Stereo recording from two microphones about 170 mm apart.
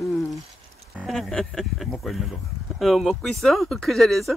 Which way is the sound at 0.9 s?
Centre (ahead or behind).